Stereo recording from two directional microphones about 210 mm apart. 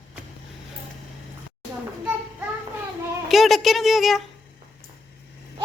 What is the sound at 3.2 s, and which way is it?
Speech, centre (ahead or behind).